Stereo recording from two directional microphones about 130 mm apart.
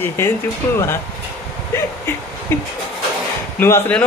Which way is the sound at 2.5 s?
15° left (ahead or behind).